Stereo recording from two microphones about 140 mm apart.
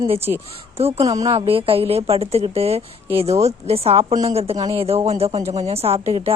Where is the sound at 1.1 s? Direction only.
25° right (ahead or behind).